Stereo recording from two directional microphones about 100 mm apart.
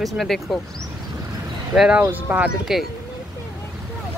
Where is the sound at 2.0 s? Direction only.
15° right (ahead or behind).